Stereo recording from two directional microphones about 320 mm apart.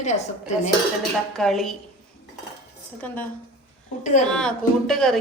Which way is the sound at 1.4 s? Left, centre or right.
Centre.